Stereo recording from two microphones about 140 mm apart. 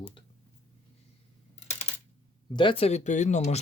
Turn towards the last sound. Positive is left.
turn(degrees=55)  # may be behind; listen again after turning